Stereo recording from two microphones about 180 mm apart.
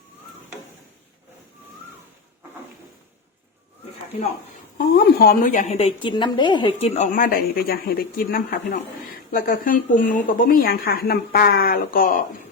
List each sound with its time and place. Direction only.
4.8 s a woman's voice: 55° left (ahead or behind)